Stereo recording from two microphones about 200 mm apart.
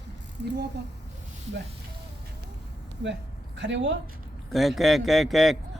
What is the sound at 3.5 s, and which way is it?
Speech, 60° right (ahead or behind).